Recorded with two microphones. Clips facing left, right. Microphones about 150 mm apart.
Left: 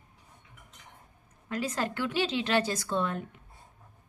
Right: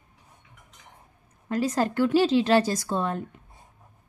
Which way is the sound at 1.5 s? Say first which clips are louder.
Right 7 dB; 40° right (ahead or behind).